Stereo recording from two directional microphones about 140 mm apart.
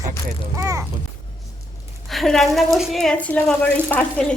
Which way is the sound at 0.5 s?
25° right (ahead or behind).